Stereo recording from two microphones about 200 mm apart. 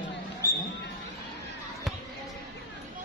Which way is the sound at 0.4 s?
15° left (ahead or behind).